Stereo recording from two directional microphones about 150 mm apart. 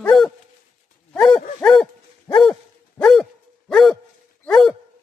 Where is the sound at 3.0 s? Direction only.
5° left (ahead or behind).